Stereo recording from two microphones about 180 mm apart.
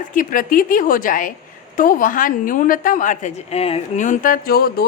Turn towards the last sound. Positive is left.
turn(degrees=60)  # may be behind; listen again after turning